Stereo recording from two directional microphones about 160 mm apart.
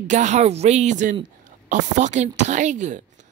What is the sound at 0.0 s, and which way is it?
Speech, 50° right (ahead or behind).